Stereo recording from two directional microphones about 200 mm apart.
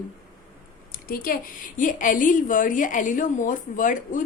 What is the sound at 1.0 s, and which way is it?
A woman's voice, 45° left (ahead or behind).